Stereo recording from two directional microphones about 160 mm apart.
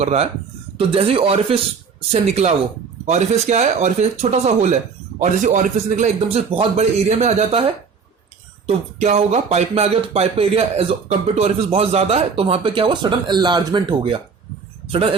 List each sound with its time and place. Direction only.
0.0 s a man's voice: 40° right (ahead or behind)